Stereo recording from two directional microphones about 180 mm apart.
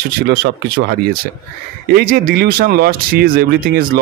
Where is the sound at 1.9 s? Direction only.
50° right (ahead or behind).